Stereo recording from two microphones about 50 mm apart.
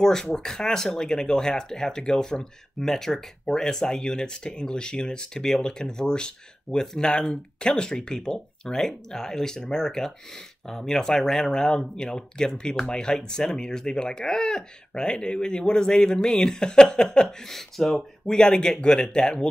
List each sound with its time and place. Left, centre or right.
0.0 s speech: centre
18.2 s speech: centre